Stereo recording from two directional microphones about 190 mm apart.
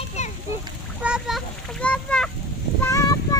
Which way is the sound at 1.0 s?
5° right (ahead or behind).